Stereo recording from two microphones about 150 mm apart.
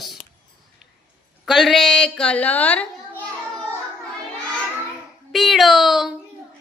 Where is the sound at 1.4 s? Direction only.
Centre (ahead or behind).